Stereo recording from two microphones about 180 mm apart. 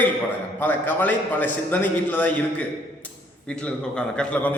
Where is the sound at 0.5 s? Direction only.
10° left (ahead or behind).